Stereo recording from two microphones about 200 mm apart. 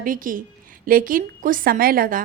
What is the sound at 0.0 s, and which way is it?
A woman's voice, 45° right (ahead or behind).